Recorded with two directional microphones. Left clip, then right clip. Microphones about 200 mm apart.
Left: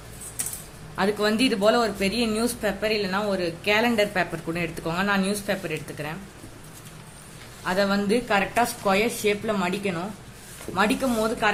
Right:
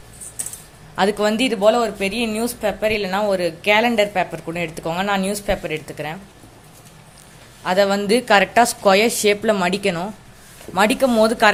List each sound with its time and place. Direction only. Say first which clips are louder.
0.9 s a woman's voice: right 5 dB; 25° right (ahead or behind)
7.6 s a woman's voice: right 7 dB; 30° right (ahead or behind)